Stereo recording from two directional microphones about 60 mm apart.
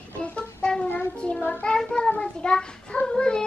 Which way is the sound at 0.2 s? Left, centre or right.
Centre.